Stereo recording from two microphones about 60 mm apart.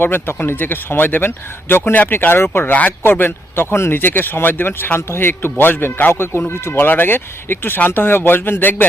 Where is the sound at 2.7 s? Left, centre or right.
Left.